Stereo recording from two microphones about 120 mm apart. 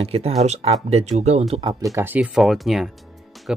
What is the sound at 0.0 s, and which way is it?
Speech, 55° right (ahead or behind).